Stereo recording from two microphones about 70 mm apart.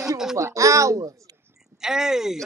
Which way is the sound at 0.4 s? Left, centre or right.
Right.